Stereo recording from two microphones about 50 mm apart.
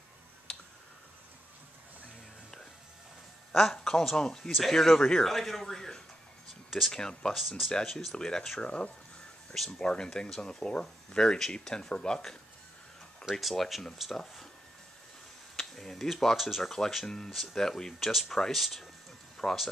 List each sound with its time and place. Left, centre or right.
3.5 s speech: centre
4.5 s speech: centre
7.3 s speech: centre
8.2 s speech: centre
13.3 s speech: centre
15.5 s speech: centre
17.0 s speech: centre
17.3 s speech: centre
17.6 s speech: centre
18.0 s speech: centre
19.3 s a sound: centre